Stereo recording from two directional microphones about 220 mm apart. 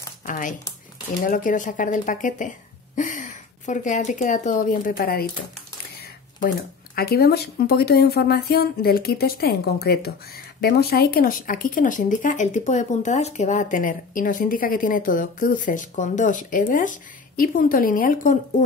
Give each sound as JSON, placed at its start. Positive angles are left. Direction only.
{"t": 0.2, "sound": "a sound", "side_deg": 35}
{"t": 1.2, "sound": "speech", "side_deg": 35}
{"t": 7.0, "sound": "speech", "side_deg": 45}